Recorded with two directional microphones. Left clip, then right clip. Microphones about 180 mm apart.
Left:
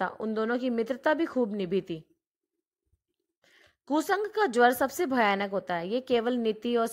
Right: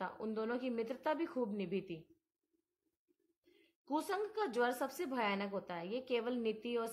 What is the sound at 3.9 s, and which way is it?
Speech, 35° left (ahead or behind).